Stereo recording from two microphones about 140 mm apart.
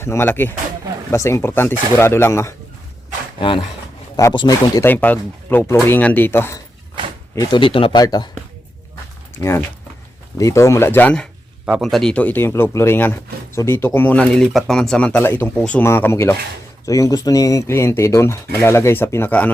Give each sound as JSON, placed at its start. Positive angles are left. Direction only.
{"t": 0.0, "sound": "speech", "side_deg": 20}
{"t": 3.4, "sound": "speech", "side_deg": 35}
{"t": 4.9, "sound": "speech", "side_deg": 10}
{"t": 7.3, "sound": "speech", "side_deg": 35}
{"t": 8.0, "sound": "speech", "side_deg": 30}
{"t": 9.4, "sound": "speech", "side_deg": 20}
{"t": 11.6, "sound": "speech", "side_deg": -5}